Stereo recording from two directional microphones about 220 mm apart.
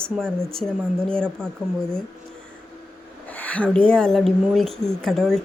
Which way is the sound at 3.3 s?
5° left (ahead or behind).